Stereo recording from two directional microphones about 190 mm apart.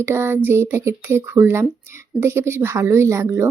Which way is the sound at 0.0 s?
15° right (ahead or behind).